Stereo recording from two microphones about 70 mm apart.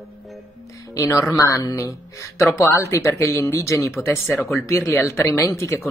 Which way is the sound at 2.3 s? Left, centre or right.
Left.